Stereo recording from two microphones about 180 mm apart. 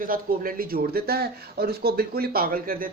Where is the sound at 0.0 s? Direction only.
50° right (ahead or behind).